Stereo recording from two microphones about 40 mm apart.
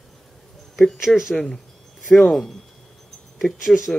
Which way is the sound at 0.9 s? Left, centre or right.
Centre.